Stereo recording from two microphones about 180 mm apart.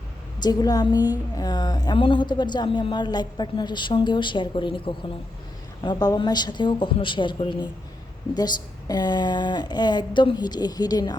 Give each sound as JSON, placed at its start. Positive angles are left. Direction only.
{"t": 0.4, "sound": "a woman's voice", "side_deg": 20}